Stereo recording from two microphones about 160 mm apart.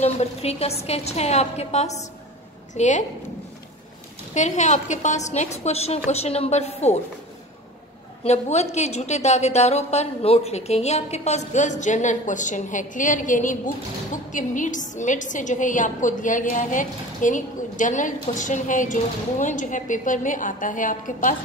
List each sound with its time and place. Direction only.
0.0 s a woman's voice: 40° left (ahead or behind)
4.3 s a woman's voice: 50° left (ahead or behind)
8.2 s a woman's voice: 45° left (ahead or behind)